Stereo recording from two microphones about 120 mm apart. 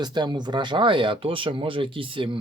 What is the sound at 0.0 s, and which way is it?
Speech, 40° right (ahead or behind).